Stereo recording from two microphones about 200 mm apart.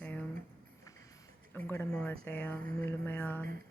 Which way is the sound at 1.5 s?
10° left (ahead or behind).